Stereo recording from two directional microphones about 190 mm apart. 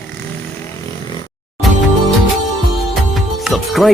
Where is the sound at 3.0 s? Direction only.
Centre (ahead or behind).